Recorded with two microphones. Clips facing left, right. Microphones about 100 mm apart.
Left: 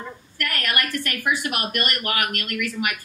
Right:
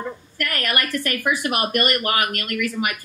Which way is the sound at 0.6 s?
40° right (ahead or behind).